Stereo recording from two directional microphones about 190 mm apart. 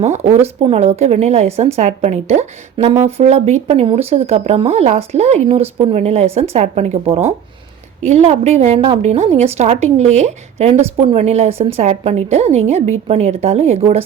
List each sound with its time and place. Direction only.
0.0 s a woman's voice: 35° right (ahead or behind)